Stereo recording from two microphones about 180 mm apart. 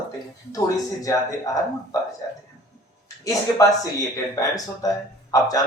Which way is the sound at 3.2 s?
20° left (ahead or behind).